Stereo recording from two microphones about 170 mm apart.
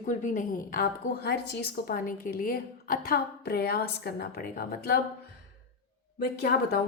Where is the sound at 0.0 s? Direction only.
50° left (ahead or behind); by 4.9 s 65° left (ahead or behind).